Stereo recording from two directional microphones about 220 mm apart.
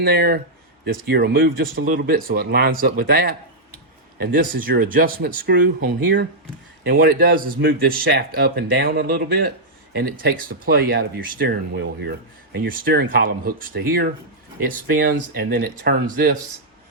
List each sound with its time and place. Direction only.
0.0 s speech: 45° right (ahead or behind)